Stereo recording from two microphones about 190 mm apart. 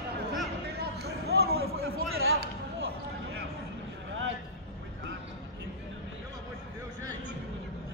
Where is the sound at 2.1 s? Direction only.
90° right.